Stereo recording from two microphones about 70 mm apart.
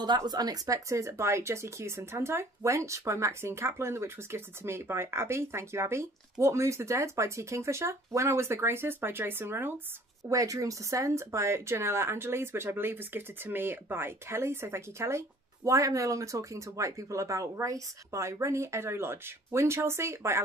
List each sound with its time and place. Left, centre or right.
0.0 s speech: right
10.3 s speech: right